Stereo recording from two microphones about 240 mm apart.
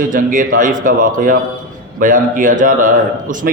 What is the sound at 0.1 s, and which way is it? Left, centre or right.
A man's voice, right.